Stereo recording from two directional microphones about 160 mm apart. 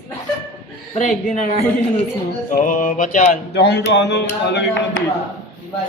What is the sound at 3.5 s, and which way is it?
Speech, 90° left.